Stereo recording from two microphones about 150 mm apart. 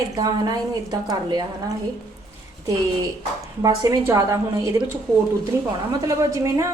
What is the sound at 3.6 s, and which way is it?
A woman's voice, 25° right (ahead or behind).